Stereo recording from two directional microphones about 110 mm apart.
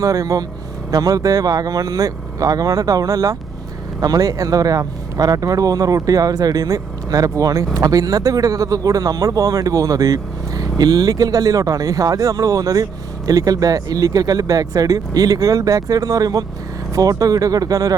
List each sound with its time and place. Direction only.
0.0 s speech: 30° right (ahead or behind)